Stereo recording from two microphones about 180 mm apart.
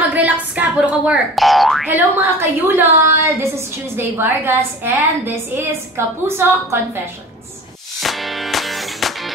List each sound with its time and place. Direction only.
0.1 s speech: 10° right (ahead or behind)
1.9 s a woman's voice: 10° right (ahead or behind)
8.0 s music: centre (ahead or behind)